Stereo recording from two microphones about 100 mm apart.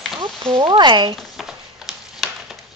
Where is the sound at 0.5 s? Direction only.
50° right (ahead or behind).